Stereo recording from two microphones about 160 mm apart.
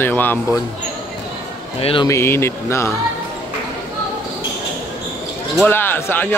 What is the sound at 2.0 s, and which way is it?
Speech, 15° left (ahead or behind).